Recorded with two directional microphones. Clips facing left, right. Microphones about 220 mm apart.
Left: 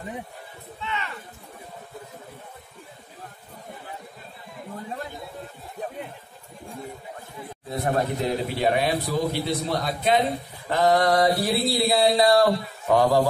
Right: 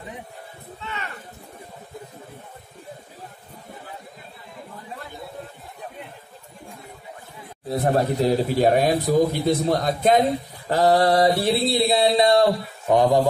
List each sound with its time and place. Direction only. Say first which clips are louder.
0.7 s speech: left 2 dB; 45° right (ahead or behind)
7.7 s speech: right 4 dB; 35° right (ahead or behind)
10.7 s mantra: right 2 dB; 30° right (ahead or behind)